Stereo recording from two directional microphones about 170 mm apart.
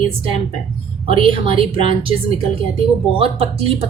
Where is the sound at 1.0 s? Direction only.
30° right (ahead or behind).